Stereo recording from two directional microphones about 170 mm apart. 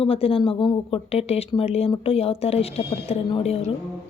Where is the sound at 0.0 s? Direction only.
35° left (ahead or behind).